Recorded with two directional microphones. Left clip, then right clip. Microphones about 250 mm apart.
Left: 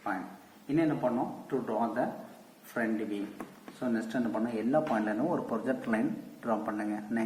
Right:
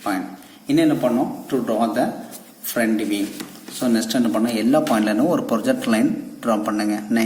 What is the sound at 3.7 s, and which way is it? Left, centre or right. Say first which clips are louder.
Speech: right 12 dB; right.